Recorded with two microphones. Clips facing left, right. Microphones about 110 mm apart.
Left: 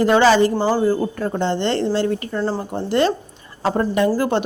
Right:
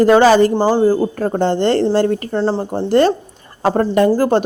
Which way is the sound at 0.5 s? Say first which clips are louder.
Right 4 dB; 30° right (ahead or behind).